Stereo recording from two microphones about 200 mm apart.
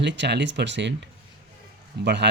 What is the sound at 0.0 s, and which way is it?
Speech, 60° right (ahead or behind).